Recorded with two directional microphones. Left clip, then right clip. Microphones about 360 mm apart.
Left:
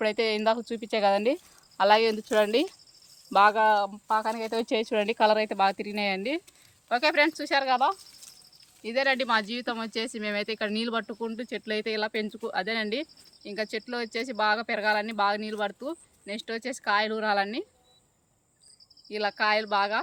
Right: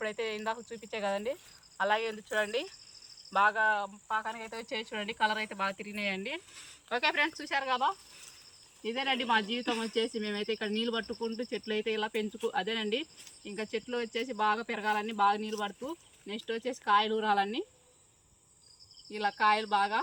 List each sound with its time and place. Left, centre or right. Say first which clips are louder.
0.0 s speech: left 9 dB; left
19.0 s speech: left 2 dB; centre